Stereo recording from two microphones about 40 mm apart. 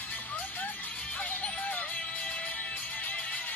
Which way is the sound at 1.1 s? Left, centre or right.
Left.